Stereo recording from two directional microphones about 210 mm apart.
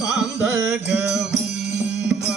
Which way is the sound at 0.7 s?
Centre (ahead or behind).